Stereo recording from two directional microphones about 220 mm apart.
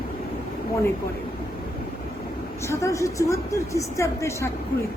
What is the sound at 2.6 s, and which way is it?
Speech, 15° left (ahead or behind).